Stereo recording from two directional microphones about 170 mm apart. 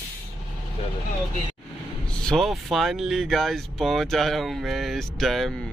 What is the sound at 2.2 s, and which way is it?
Speech, centre (ahead or behind).